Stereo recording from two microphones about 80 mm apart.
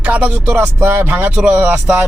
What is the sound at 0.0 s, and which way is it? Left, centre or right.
Speech, centre.